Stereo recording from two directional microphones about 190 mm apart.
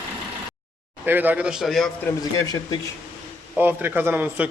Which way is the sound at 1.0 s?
10° right (ahead or behind).